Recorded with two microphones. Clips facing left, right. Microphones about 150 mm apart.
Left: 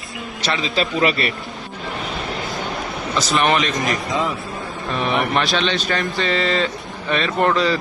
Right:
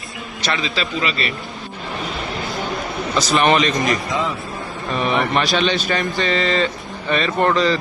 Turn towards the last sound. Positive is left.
turn(degrees=5)  # may be behind; listen again after turning